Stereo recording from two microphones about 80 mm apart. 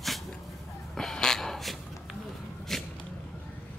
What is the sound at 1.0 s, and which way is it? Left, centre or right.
Gasp, centre.